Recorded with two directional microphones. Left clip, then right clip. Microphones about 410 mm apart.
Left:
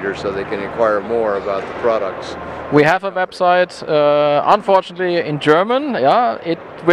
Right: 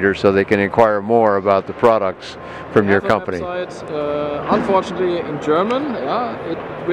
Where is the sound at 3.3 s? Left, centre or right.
Left.